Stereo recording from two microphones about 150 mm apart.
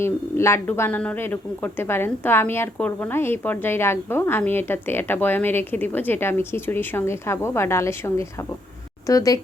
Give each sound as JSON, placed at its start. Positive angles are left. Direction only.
{"t": 0.0, "sound": "a woman's voice", "side_deg": 15}